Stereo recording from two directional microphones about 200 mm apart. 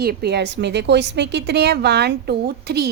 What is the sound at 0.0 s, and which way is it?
A woman's voice, 50° right (ahead or behind).